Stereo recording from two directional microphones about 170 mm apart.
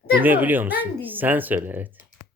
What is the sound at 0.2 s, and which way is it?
Speech, 10° right (ahead or behind).